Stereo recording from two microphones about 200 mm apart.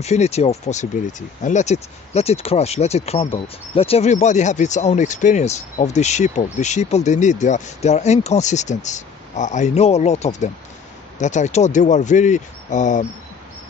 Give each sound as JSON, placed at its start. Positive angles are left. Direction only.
{"t": 0.0, "sound": "speech", "side_deg": 35}